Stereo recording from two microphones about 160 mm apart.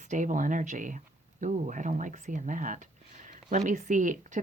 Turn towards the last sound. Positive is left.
turn(degrees=-50)  # may be behind; listen again after turning